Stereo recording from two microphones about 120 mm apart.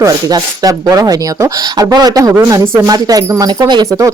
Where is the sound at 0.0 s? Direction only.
30° right (ahead or behind).